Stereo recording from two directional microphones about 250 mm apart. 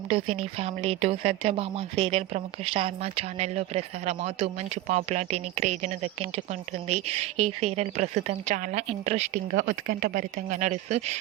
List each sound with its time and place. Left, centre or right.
0.1 s a woman's voice: right